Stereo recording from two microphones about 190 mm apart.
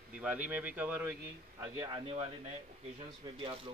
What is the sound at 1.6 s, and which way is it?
Speech, 20° right (ahead or behind).